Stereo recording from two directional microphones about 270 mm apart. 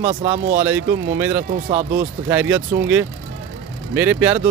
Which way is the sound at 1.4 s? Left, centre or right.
Right.